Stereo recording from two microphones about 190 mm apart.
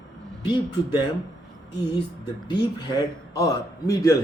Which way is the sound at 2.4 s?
20° left (ahead or behind).